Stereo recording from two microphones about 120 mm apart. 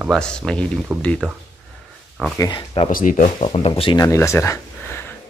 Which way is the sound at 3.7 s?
40° left (ahead or behind).